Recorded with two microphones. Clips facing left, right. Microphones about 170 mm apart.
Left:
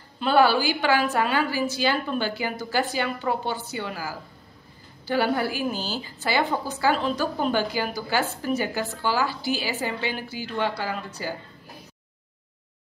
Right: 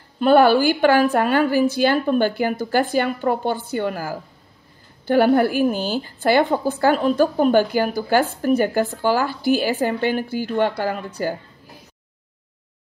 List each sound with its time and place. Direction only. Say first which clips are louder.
0.2 s a woman's voice: right 6 dB; 50° right (ahead or behind)